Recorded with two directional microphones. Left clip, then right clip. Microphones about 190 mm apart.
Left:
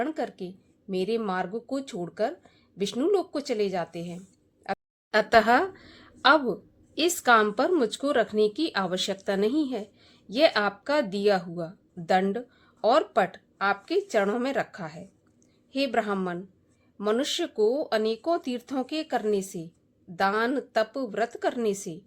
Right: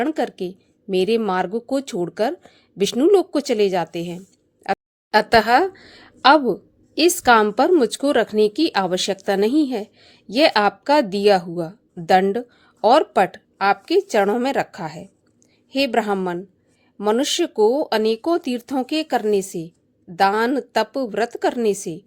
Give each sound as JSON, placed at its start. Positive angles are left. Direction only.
{"t": 0.0, "sound": "speech", "side_deg": -40}
{"t": 5.1, "sound": "speech", "side_deg": -30}